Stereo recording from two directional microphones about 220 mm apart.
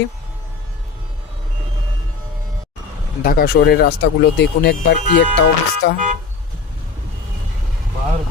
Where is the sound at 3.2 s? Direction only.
45° left (ahead or behind).